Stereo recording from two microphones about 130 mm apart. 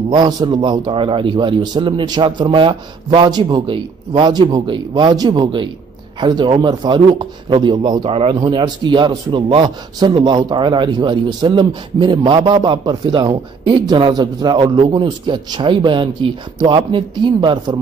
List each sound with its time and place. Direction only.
0.1 s a man's voice: 35° right (ahead or behind)
8.0 s speech: 45° right (ahead or behind)
8.4 s a man's voice: 35° right (ahead or behind)